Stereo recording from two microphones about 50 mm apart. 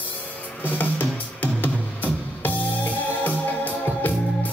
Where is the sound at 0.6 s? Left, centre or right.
Left.